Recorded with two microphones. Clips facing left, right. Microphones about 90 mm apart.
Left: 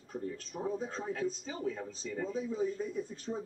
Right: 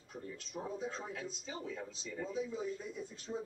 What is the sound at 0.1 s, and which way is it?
A man's voice, 40° left (ahead or behind).